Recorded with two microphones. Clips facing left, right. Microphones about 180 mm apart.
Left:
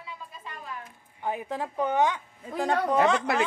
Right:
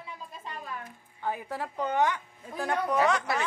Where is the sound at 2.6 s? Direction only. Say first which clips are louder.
Left 3 dB; 30° left (ahead or behind).